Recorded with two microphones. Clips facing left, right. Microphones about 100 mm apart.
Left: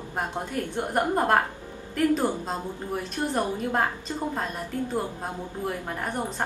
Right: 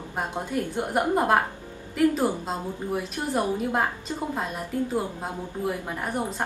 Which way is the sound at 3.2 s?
5° right (ahead or behind).